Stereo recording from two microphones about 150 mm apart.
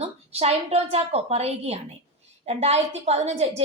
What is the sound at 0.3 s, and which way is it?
A woman's voice, 45° right (ahead or behind).